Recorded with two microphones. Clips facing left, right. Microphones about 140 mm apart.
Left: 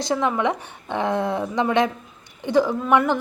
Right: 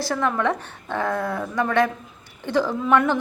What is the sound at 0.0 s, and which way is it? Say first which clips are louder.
A woman's voice: left 1 dB; 15° left (ahead or behind).